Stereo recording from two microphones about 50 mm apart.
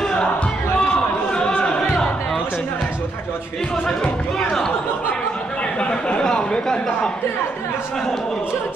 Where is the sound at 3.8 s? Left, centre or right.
Centre.